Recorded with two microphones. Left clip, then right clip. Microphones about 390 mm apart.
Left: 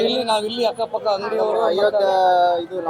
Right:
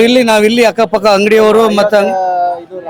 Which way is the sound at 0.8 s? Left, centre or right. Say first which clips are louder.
Right 12 dB; right.